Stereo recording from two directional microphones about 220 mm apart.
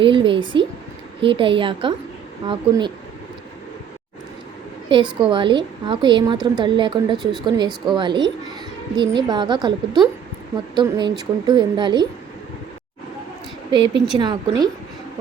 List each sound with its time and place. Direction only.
0.0 s a woman's voice: 25° right (ahead or behind)
5.2 s a woman's voice: 20° right (ahead or behind)
13.7 s a woman's voice: 20° right (ahead or behind)